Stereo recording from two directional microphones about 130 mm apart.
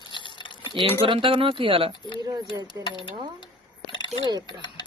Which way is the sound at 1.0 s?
40° right (ahead or behind).